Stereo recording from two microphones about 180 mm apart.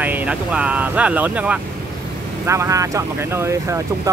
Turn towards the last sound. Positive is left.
turn(degrees=-15)  # may be behind; listen again after turning